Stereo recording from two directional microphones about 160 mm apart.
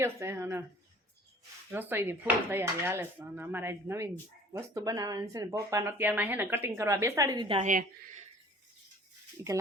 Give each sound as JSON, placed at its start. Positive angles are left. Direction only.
{"t": 0.0, "sound": "speech", "side_deg": -15}
{"t": 1.7, "sound": "speech", "side_deg": -15}
{"t": 7.6, "sound": "a woman's voice", "side_deg": -55}
{"t": 9.4, "sound": "speech", "side_deg": -20}